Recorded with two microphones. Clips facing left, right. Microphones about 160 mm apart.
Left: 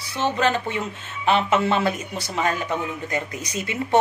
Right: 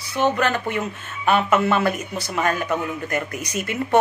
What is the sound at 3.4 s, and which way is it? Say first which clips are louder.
Speech: right 2 dB; 55° right (ahead or behind).